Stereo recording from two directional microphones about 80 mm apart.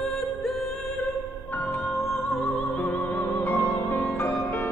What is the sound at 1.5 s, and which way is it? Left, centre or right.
Music, left.